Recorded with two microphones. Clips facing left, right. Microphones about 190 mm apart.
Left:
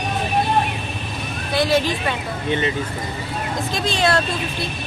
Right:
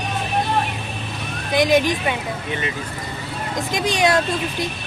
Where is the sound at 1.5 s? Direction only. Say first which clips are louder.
Right 2 dB; 15° right (ahead or behind).